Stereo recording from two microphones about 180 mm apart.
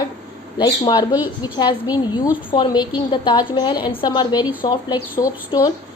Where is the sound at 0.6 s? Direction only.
25° left (ahead or behind).